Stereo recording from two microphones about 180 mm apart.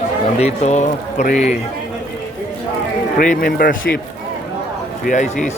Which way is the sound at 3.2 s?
50° left (ahead or behind).